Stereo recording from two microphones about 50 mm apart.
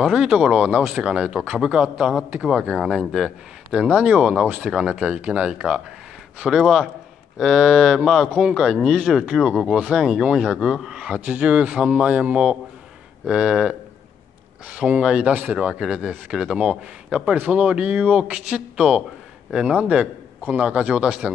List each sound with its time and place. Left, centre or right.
0.0 s speech: centre
0.6 s a man's voice: right
6.4 s speech: centre
9.6 s a man's voice: centre
17.4 s a man's voice: right